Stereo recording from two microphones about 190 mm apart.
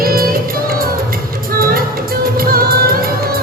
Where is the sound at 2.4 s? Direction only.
50° right (ahead or behind).